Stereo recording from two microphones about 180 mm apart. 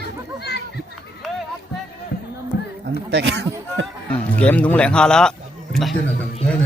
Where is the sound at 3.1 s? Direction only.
70° right (ahead or behind).